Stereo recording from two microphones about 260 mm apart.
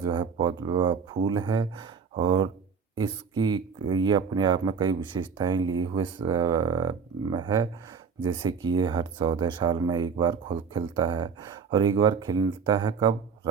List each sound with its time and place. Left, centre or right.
0.0 s speech: centre